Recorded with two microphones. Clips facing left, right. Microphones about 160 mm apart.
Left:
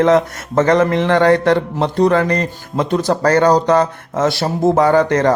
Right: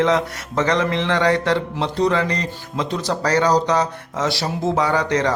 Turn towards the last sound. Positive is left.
turn(degrees=50)  # may be behind; listen again after turning